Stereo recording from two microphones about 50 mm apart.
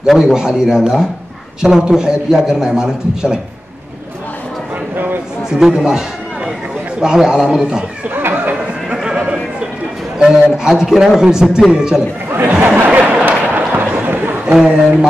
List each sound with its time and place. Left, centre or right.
0.0 s a man's voice: centre
4.9 s speech: right
5.5 s a man's voice: centre
5.9 s run: centre
7.0 s a man's voice: centre
8.1 s a sound: right
8.9 s a sound: centre
10.1 s a man's voice: centre
12.6 s a sound: right
14.5 s a man's voice: centre